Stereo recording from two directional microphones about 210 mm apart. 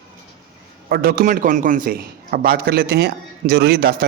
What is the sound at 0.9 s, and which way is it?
A man's voice, 45° right (ahead or behind).